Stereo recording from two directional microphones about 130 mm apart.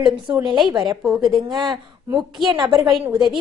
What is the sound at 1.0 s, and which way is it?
Speech, centre (ahead or behind).